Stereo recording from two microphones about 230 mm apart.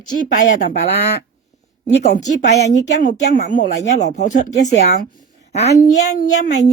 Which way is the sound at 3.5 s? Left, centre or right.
Left.